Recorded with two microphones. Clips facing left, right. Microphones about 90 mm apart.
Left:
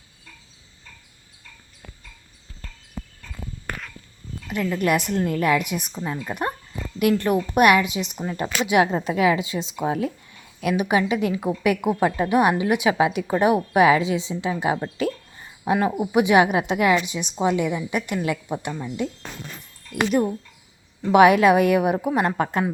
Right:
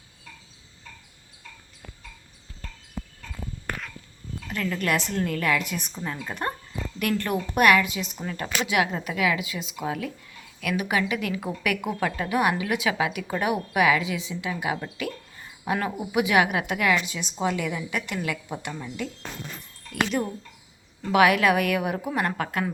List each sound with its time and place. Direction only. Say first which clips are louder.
4.4 s a woman's voice: left 5 dB; 15° left (ahead or behind)
8.8 s a woman's voice: left 7 dB; 30° left (ahead or behind)
18.7 s a woman's voice: left 4 dB; 15° left (ahead or behind)